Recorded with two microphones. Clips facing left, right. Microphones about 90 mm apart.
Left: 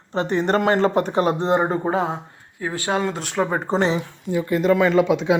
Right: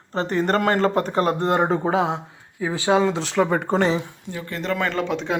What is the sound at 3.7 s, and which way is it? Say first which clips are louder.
Speech: even; 45° right (ahead or behind).